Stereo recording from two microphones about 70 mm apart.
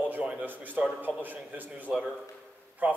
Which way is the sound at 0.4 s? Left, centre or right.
Right.